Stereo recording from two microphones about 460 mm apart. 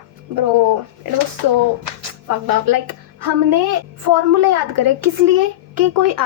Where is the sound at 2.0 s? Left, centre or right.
Right.